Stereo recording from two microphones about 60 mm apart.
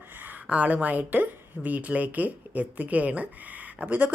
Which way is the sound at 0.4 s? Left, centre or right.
Right.